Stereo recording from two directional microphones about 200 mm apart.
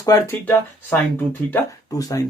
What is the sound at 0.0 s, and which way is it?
Speech, 15° left (ahead or behind).